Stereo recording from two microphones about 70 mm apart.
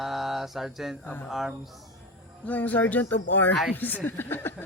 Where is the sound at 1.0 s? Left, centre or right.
Left.